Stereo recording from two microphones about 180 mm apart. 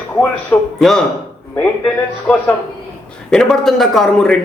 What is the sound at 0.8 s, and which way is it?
Speech, centre (ahead or behind).